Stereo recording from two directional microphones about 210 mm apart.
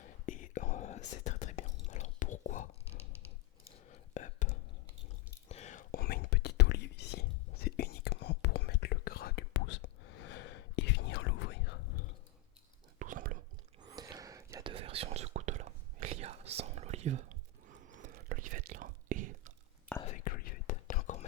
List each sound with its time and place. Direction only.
0.3 s whispering: 40° left (ahead or behind)
3.8 s whispering: 35° left (ahead or behind); by 11.8 s 55° left (ahead or behind)
13.0 s chewing: 40° right (ahead or behind)
13.8 s whispering: 20° right (ahead or behind); by 19.5 s 40° right (ahead or behind)
20.1 s whispering: 40° left (ahead or behind)